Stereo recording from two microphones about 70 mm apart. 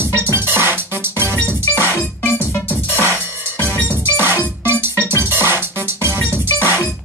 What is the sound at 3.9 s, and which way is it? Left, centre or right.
Music, right.